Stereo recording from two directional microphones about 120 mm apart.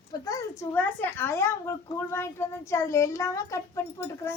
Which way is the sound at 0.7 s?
15° left (ahead or behind).